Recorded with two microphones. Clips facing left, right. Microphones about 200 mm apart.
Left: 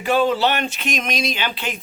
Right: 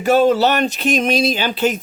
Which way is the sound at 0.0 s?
45° right (ahead or behind).